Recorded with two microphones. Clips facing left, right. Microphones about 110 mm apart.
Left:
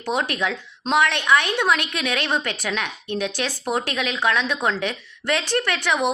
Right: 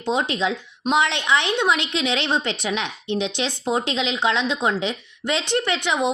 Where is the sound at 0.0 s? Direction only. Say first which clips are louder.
Right 2 dB; 20° right (ahead or behind).